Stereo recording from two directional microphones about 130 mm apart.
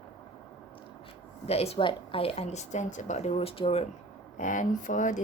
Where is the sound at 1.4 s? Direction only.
55° left (ahead or behind).